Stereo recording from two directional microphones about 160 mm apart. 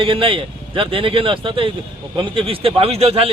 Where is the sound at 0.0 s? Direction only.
35° right (ahead or behind).